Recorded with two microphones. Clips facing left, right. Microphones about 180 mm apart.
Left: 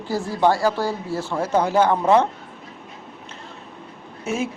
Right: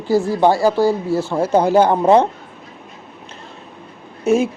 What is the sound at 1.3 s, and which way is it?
Speech, 30° right (ahead or behind).